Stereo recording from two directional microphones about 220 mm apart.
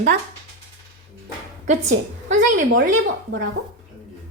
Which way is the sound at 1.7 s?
35° right (ahead or behind).